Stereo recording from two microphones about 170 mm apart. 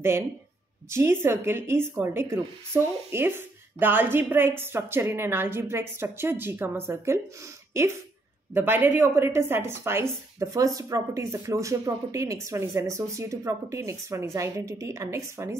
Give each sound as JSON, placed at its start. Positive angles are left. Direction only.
{"t": 0.8, "sound": "a woman's voice", "side_deg": -15}